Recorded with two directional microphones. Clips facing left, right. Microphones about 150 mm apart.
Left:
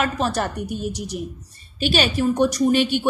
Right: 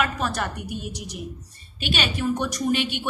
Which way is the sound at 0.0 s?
35° left (ahead or behind).